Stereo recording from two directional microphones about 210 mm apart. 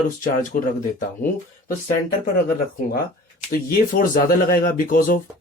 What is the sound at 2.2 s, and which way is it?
Speech, 45° left (ahead or behind).